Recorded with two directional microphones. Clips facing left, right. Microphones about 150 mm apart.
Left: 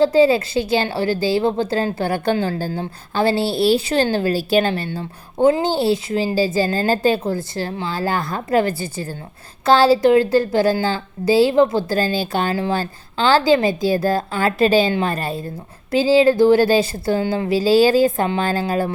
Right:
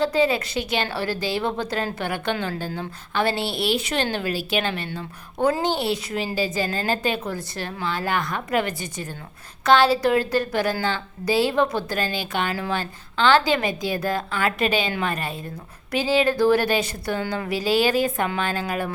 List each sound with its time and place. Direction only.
0.0 s a woman's voice: 30° left (ahead or behind)